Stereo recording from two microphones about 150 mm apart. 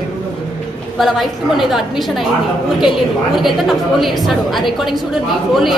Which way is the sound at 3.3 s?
Centre (ahead or behind).